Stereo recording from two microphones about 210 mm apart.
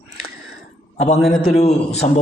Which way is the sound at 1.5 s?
30° left (ahead or behind).